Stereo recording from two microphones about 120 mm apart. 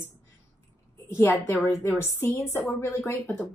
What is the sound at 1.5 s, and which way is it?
A woman's voice, 20° left (ahead or behind).